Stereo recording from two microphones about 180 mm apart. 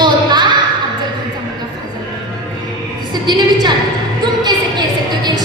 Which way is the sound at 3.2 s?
25° right (ahead or behind).